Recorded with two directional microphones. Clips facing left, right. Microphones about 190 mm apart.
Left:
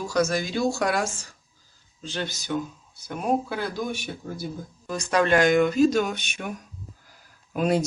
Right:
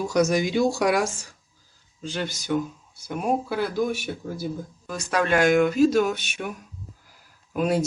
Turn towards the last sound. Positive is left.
turn(degrees=-5)  # may be behind; listen again after turning